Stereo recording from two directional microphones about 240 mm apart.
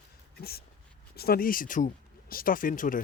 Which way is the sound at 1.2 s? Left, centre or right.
Left.